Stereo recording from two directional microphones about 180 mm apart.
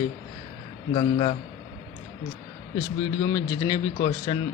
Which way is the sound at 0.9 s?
30° left (ahead or behind).